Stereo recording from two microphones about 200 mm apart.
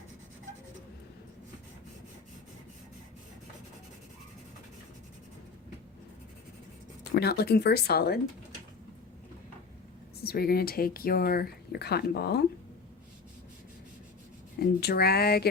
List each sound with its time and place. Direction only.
7.0 s speech: 55° left (ahead or behind)
10.2 s speech: 50° left (ahead or behind)
14.6 s speech: 50° left (ahead or behind)